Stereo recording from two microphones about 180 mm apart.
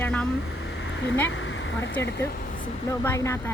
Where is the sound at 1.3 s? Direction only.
90° left.